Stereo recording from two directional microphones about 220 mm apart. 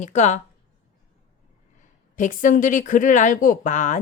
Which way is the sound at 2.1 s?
35° left (ahead or behind).